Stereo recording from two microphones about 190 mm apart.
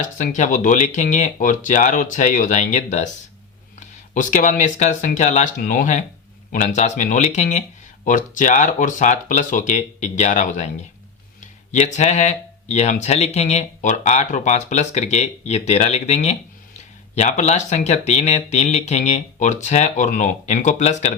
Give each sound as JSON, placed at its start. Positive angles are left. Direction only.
{"t": 0.0, "sound": "speech", "side_deg": 40}
{"t": 11.7, "sound": "speech", "side_deg": 40}